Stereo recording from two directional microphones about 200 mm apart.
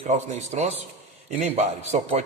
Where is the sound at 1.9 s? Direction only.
30° right (ahead or behind).